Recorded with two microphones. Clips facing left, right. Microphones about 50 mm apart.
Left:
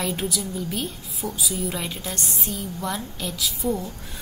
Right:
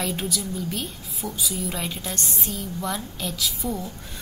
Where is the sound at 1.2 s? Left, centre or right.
Centre.